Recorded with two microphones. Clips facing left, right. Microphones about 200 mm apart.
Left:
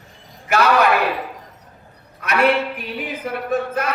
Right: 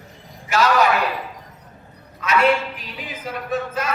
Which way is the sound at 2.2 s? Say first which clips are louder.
Left 1 dB; 60° left (ahead or behind).